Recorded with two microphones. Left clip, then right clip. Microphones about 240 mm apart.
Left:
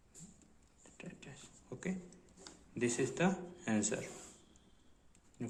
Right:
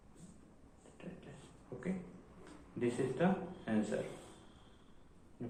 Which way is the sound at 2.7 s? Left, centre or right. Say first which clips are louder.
Even; left.